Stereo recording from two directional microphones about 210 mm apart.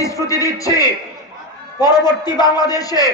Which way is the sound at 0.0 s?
15° left (ahead or behind).